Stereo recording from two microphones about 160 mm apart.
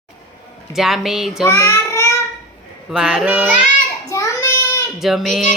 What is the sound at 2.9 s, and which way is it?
Speech, 5° right (ahead or behind).